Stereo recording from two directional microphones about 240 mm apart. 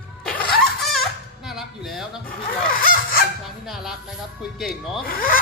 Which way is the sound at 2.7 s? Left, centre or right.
Left.